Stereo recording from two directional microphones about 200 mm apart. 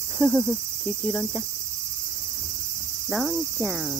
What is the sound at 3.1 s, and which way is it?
Cricket, centre (ahead or behind).